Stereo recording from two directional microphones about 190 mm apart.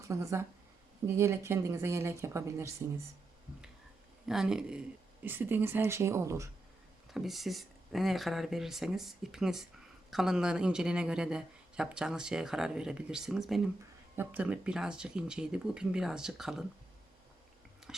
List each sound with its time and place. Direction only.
0.0 s speech: 15° right (ahead or behind)
4.3 s speech: centre (ahead or behind)
7.1 s speech: centre (ahead or behind)